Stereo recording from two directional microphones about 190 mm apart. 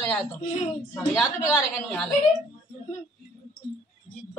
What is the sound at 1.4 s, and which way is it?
Speech, 10° left (ahead or behind).